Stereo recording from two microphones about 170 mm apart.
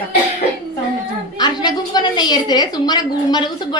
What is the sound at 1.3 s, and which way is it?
A woman's voice, 25° left (ahead or behind).